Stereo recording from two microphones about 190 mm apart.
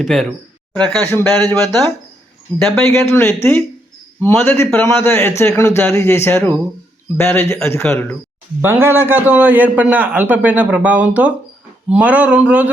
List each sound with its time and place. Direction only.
0.0 s a sound: centre (ahead or behind)
0.9 s a man's voice: 10° left (ahead or behind)
2.6 s a man's voice: 10° left (ahead or behind)
8.6 s a man's voice: 10° right (ahead or behind)